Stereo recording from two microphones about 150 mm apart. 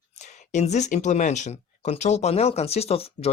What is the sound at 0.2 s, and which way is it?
Speech, 50° left (ahead or behind).